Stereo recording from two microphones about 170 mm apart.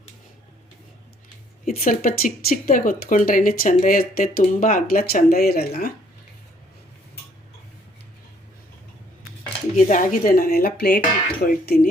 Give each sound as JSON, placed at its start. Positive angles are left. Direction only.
{"t": 1.6, "sound": "speech", "side_deg": 55}
{"t": 9.7, "sound": "speech", "side_deg": 50}